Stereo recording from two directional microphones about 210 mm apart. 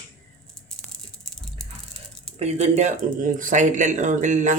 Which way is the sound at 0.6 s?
Centre (ahead or behind).